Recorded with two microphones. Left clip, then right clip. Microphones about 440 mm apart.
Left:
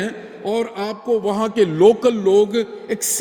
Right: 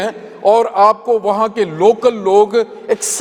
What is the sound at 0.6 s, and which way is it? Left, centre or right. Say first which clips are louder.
Speech: right 10 dB; right.